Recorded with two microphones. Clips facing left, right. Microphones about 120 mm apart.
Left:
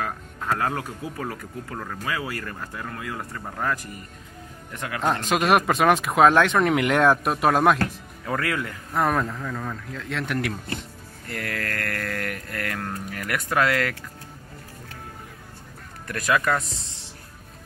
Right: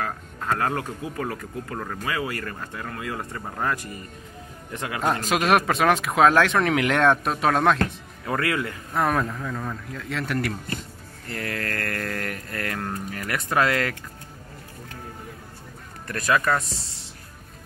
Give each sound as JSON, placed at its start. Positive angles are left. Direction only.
{"t": 0.5, "sound": "speech", "side_deg": 10}
{"t": 1.8, "sound": "speech", "side_deg": -10}
{"t": 2.4, "sound": "speech", "side_deg": 0}
{"t": 3.0, "sound": "speech", "side_deg": -15}
{"t": 3.3, "sound": "speech", "side_deg": -5}
{"t": 5.0, "sound": "speech", "side_deg": 0}
{"t": 8.3, "sound": "speech", "side_deg": -10}
{"t": 8.9, "sound": "speech", "side_deg": 0}
{"t": 11.3, "sound": "mantra", "side_deg": -20}
{"t": 12.5, "sound": "speech", "side_deg": -15}
{"t": 16.1, "sound": "speech", "side_deg": 15}